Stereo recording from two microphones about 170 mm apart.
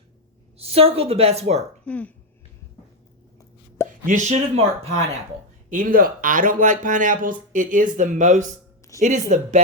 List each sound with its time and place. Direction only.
0.6 s a woman's voice: 35° right (ahead or behind)
1.8 s speech: 10° left (ahead or behind)
3.8 s speech: 50° right (ahead or behind)